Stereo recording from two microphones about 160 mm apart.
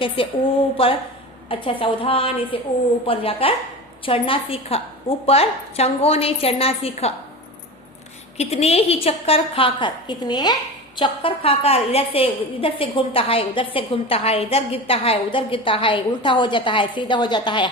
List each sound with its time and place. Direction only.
0.2 s a woman's voice: 35° left (ahead or behind)
8.4 s a woman's voice: 40° left (ahead or behind)